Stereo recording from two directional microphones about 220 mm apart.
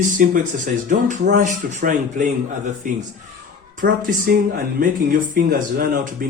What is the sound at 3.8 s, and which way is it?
Speech, 45° right (ahead or behind).